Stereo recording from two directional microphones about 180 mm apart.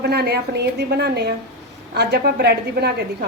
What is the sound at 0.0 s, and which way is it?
A woman's voice, 60° right (ahead or behind).